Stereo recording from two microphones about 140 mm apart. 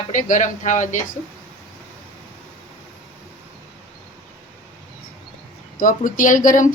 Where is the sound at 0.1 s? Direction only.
65° left (ahead or behind).